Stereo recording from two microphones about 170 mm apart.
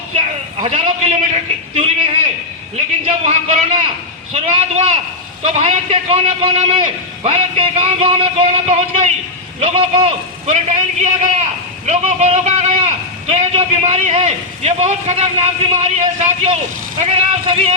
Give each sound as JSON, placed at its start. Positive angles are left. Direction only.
{"t": 0.6, "sound": "a sound", "side_deg": -40}
{"t": 2.7, "sound": "a man's voice", "side_deg": -40}
{"t": 17.0, "sound": "a man's voice", "side_deg": -35}